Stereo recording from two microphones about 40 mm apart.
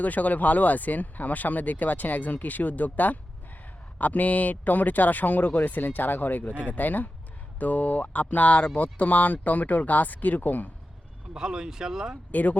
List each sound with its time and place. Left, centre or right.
0.0 s speech: left
11.3 s speech: centre
12.3 s speech: left